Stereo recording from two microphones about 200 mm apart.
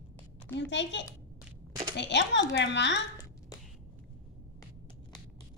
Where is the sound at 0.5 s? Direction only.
60° left (ahead or behind).